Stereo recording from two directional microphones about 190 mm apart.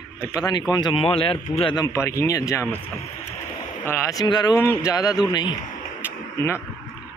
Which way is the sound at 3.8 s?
15° left (ahead or behind).